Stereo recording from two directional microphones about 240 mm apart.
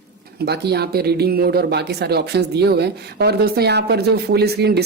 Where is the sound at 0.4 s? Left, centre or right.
Right.